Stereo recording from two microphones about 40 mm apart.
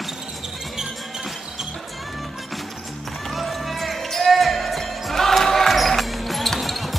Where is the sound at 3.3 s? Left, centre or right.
Centre.